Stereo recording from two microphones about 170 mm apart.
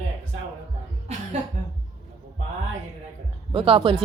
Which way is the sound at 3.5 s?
30° right (ahead or behind).